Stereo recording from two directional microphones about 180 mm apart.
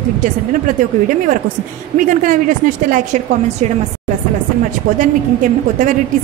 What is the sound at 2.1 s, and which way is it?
A woman's voice, 45° right (ahead or behind).